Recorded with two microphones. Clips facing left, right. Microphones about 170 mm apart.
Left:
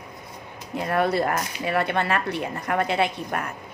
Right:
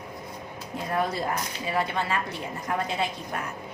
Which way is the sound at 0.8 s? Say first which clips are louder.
Left 6 dB; 70° left (ahead or behind).